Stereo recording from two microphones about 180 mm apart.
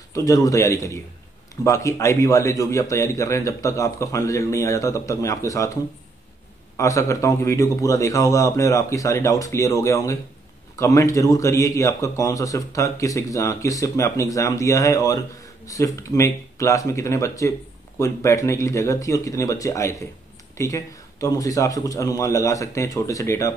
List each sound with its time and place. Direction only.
0.1 s a man's voice: 20° left (ahead or behind)
6.8 s a man's voice: 15° left (ahead or behind)